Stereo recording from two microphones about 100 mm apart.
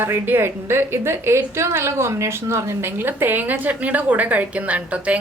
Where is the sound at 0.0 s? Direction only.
20° right (ahead or behind).